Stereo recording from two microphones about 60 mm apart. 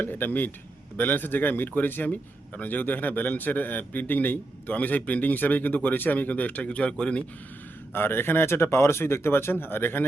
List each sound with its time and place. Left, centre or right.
0.0 s a man's voice: left
7.9 s speech: left